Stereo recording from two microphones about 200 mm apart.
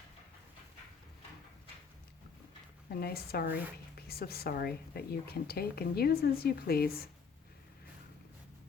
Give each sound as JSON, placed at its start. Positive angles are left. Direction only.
{"t": 2.9, "sound": "a woman's voice", "side_deg": 50}